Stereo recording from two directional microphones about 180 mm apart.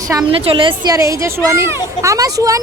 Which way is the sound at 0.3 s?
30° right (ahead or behind).